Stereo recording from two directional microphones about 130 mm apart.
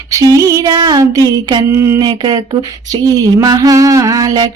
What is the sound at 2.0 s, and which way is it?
Speech, 35° right (ahead or behind).